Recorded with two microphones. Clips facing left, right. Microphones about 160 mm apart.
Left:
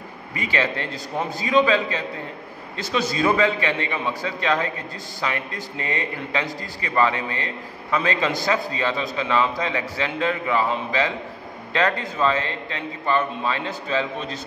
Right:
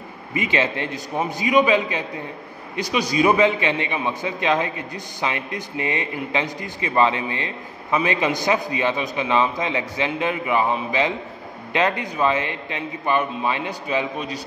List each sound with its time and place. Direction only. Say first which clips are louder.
0.3 s a man's voice: right 2 dB; 20° right (ahead or behind)